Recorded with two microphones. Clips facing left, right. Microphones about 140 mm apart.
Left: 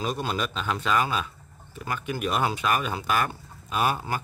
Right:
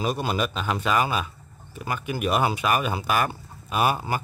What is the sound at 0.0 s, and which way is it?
Speech, 10° right (ahead or behind).